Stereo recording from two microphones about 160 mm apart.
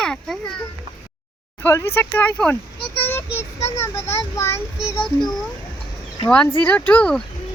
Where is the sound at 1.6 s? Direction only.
15° left (ahead or behind).